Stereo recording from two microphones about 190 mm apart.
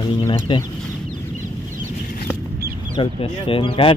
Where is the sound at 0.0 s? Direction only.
25° left (ahead or behind).